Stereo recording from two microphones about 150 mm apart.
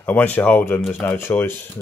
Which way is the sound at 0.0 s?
10° left (ahead or behind).